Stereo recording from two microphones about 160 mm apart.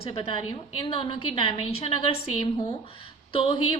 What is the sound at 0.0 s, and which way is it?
A woman's voice, 35° left (ahead or behind).